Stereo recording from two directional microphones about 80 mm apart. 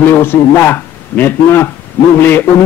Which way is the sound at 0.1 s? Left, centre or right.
Left.